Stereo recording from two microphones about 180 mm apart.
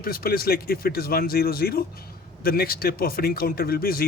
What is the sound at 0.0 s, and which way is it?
Speech, 55° left (ahead or behind).